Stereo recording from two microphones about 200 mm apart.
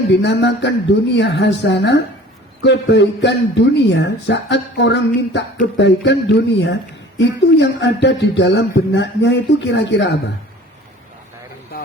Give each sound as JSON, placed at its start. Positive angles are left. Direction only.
{"t": 0.2, "sound": "speech", "side_deg": 60}